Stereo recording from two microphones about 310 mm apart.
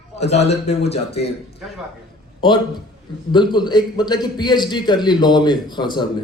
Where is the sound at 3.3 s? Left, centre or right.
Centre.